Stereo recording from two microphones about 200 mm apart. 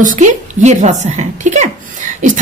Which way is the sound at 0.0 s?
35° right (ahead or behind).